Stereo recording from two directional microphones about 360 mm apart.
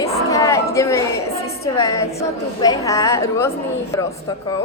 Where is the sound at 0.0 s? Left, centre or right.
Centre.